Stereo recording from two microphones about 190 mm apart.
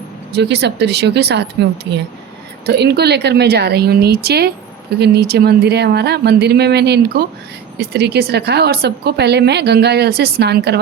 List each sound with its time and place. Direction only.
0.3 s speech: 60° right (ahead or behind)